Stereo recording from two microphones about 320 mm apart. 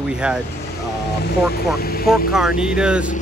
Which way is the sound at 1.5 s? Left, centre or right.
Left.